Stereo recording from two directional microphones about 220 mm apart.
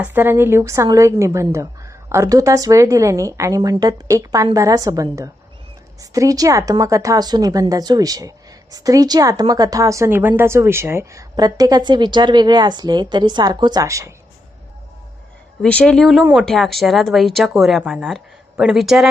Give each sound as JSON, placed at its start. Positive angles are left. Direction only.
{"t": 0.0, "sound": "a woman's voice", "side_deg": -10}
{"t": 15.6, "sound": "speech", "side_deg": 5}